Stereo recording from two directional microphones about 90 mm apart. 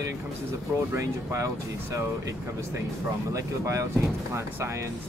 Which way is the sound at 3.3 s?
35° right (ahead or behind).